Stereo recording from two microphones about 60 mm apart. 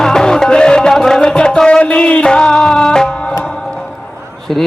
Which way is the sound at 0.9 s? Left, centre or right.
Centre.